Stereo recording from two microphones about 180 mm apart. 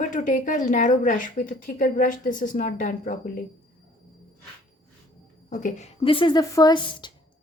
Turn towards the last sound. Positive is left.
turn(degrees=25)  # may be behind; listen again after turning